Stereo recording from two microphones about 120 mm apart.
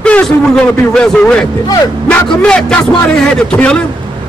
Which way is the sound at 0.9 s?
5° left (ahead or behind).